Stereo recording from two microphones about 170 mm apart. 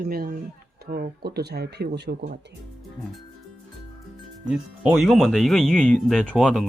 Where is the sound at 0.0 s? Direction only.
60° right (ahead or behind).